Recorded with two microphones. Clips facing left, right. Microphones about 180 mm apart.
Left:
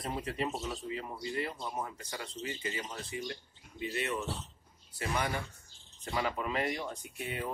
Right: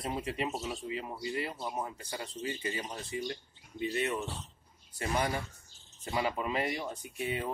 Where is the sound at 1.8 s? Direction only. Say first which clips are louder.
Right 2 dB; 25° right (ahead or behind).